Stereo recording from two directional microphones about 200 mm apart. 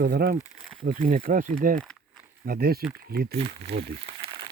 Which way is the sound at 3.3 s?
25° right (ahead or behind).